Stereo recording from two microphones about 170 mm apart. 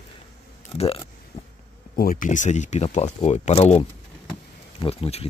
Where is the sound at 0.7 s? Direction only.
35° left (ahead or behind).